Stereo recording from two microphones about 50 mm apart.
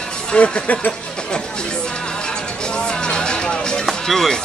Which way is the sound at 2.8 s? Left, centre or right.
Centre.